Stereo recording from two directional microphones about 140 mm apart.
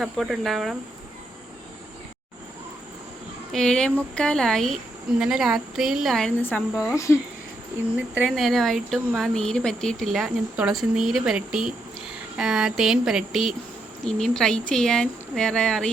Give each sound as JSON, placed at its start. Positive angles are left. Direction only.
{"t": 0.0, "sound": "speech", "side_deg": 0}
{"t": 3.5, "sound": "speech", "side_deg": 5}
{"t": 6.9, "sound": "speech", "side_deg": 20}
{"t": 7.9, "sound": "speech", "side_deg": -10}
{"t": 8.3, "sound": "speech", "side_deg": 0}